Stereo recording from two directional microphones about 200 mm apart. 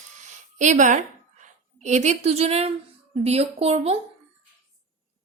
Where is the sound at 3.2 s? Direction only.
30° right (ahead or behind).